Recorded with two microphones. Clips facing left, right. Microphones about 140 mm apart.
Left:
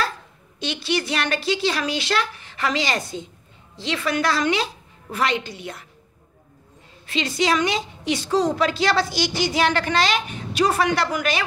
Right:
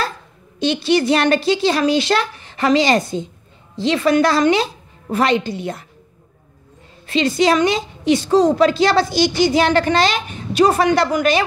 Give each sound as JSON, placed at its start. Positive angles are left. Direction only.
{"t": 0.6, "sound": "a woman's voice", "side_deg": -25}
{"t": 7.1, "sound": "a woman's voice", "side_deg": -35}